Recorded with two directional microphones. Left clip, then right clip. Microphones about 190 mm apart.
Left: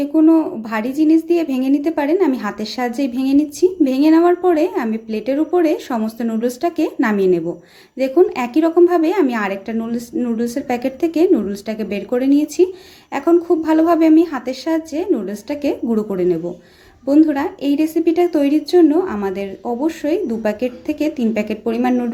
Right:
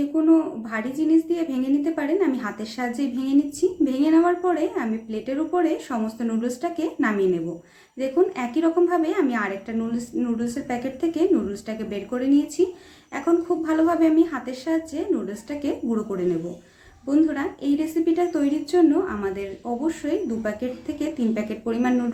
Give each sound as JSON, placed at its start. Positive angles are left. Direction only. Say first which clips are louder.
{"t": 0.2, "sound": "a woman's voice", "louder": "left 6 dB", "side_deg": 40}